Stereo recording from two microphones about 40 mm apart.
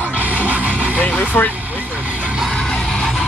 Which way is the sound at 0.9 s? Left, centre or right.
Left.